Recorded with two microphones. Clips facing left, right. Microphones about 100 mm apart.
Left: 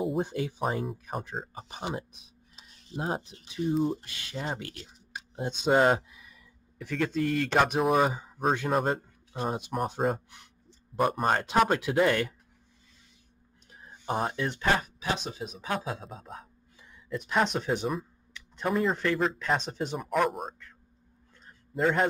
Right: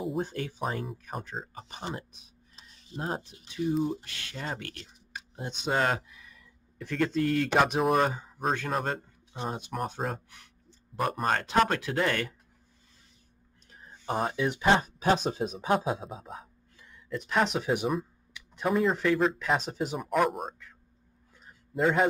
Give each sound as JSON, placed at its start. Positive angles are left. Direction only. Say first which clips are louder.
{"t": 0.2, "sound": "speech", "louder": "left 3 dB", "side_deg": 15}
{"t": 0.6, "sound": "speech", "louder": "left 2 dB", "side_deg": 5}
{"t": 2.5, "sound": "mechanisms", "louder": "left 3 dB", "side_deg": 5}
{"t": 3.6, "sound": "speech", "louder": "left 1 dB", "side_deg": 0}
{"t": 4.0, "sound": "speech", "louder": "left 2 dB", "side_deg": 15}
{"t": 6.8, "sound": "speech", "louder": "right 1 dB", "side_deg": 5}
{"t": 10.9, "sound": "speech", "louder": "left 4 dB", "side_deg": 0}
{"t": 11.2, "sound": "speech", "louder": "even", "side_deg": 15}
{"t": 13.7, "sound": "a sound", "louder": "even", "side_deg": 10}
{"t": 14.3, "sound": "speech", "louder": "right 3 dB", "side_deg": -5}
{"t": 15.0, "sound": "speech", "louder": "right 7 dB", "side_deg": -40}
{"t": 16.0, "sound": "speech", "louder": "right 2 dB", "side_deg": -5}
{"t": 21.5, "sound": "a sound", "louder": "even", "side_deg": 0}